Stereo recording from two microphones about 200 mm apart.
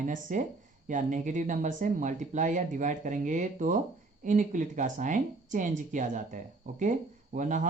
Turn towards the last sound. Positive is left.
turn(degrees=-40)  # may be behind; listen again after turning